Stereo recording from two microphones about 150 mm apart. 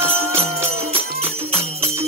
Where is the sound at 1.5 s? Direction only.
45° right (ahead or behind).